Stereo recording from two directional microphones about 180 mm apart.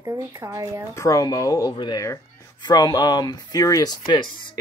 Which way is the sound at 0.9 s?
20° left (ahead or behind).